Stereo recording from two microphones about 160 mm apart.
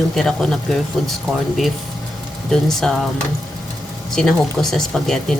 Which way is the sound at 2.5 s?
5° left (ahead or behind).